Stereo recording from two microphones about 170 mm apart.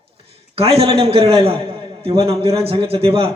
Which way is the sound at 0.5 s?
35° right (ahead or behind).